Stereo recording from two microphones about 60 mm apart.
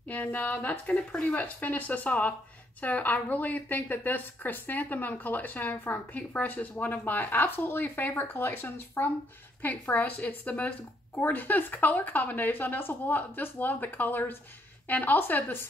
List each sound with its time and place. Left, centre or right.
0.1 s a woman's voice: left